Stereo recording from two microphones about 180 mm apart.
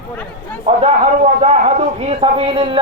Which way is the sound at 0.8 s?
35° right (ahead or behind).